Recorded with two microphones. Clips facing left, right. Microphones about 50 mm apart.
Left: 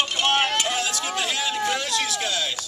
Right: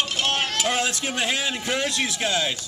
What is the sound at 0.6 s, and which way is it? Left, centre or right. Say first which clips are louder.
A man's voice: right 2 dB; right.